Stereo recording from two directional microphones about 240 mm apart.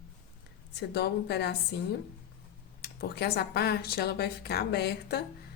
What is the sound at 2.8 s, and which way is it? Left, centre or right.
A woman's voice, left.